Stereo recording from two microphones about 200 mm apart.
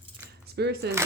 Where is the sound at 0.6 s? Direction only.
55° right (ahead or behind).